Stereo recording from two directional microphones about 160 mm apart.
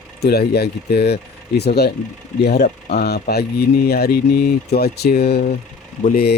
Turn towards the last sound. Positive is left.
turn(degrees=80)